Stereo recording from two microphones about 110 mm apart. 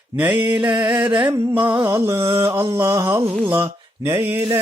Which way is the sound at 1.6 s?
40° right (ahead or behind).